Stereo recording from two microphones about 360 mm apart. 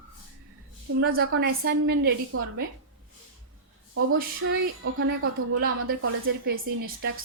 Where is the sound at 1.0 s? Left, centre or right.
Right.